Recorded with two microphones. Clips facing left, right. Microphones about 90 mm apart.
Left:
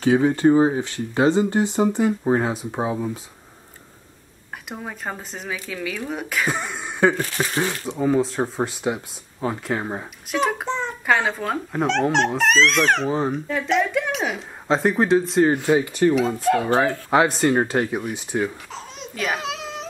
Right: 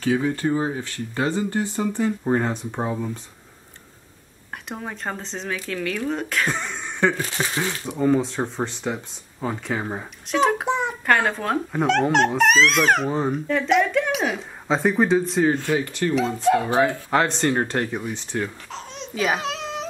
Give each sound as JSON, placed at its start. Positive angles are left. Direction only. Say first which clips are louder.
{"t": 0.0, "sound": "speech", "louder": "left 5 dB", "side_deg": 25}
{"t": 4.6, "sound": "speech", "louder": "right 1 dB", "side_deg": 5}
{"t": 7.7, "sound": "speech", "louder": "right 3 dB", "side_deg": -5}
{"t": 10.6, "sound": "a sound", "louder": "right 3 dB", "side_deg": -15}
{"t": 11.1, "sound": "speech", "louder": "even", "side_deg": 5}
{"t": 15.5, "sound": "speech", "louder": "left 4 dB", "side_deg": 15}
{"t": 16.2, "sound": "speech", "louder": "even", "side_deg": 5}